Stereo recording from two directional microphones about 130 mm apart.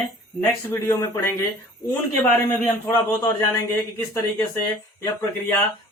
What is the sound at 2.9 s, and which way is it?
Speech, 25° left (ahead or behind).